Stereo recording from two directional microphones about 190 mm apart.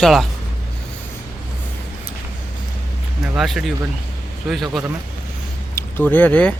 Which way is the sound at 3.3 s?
Centre (ahead or behind).